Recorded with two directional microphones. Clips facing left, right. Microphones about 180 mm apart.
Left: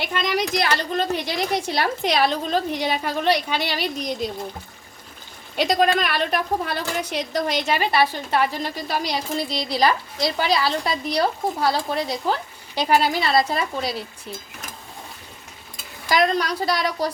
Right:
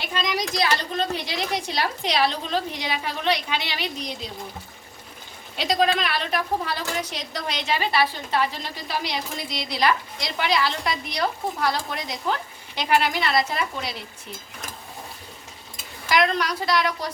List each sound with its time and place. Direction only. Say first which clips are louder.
0.1 s a woman's voice: left 2 dB; 60° left (ahead or behind); by 3.8 s 45° left (ahead or behind)
5.5 s a woman's voice: left 3 dB; 55° left (ahead or behind)
8.9 s a woman's voice: left 2 dB; 40° left (ahead or behind)
16.0 s a woman's voice: left 2 dB; 35° left (ahead or behind)